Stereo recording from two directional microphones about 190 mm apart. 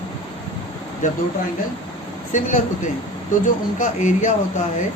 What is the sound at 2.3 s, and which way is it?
Speech, 40° left (ahead or behind).